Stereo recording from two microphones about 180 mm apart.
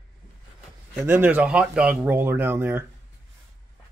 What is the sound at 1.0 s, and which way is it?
Speech, 10° right (ahead or behind).